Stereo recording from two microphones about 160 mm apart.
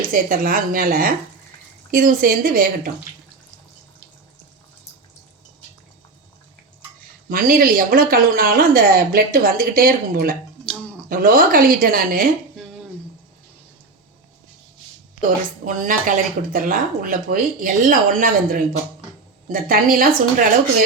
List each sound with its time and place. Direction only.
0.1 s a woman's voice: 60° right (ahead or behind)
7.3 s a woman's voice: 65° right (ahead or behind)
15.6 s a woman's voice: 55° right (ahead or behind)